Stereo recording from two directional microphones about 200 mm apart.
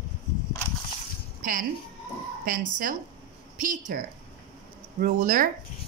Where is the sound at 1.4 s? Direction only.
45° right (ahead or behind).